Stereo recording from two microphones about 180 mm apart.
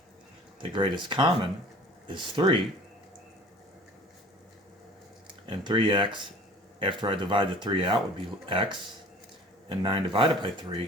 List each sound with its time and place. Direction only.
0.6 s speech: 30° right (ahead or behind)
5.3 s speech: 30° right (ahead or behind)